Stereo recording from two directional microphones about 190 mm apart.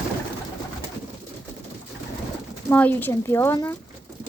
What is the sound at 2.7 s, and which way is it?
Speech, 10° left (ahead or behind).